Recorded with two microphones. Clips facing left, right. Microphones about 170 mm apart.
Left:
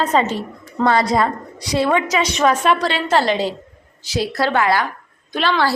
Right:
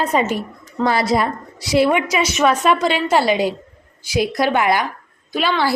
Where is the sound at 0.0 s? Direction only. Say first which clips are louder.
Left 1 dB; 10° right (ahead or behind).